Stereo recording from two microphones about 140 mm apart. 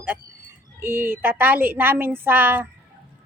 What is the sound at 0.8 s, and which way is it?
A woman's voice, 15° right (ahead or behind).